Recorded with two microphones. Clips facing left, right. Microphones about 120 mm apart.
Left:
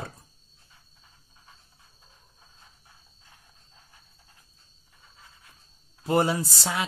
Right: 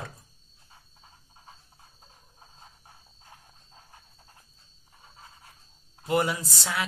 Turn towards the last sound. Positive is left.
turn(degrees=30)  # may be behind; listen again after turning